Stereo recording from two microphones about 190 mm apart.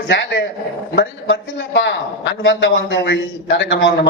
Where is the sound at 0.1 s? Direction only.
60° left (ahead or behind).